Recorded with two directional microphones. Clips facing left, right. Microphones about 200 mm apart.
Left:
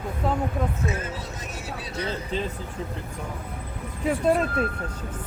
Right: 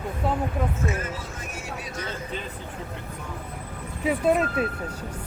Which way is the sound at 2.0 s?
30° left (ahead or behind).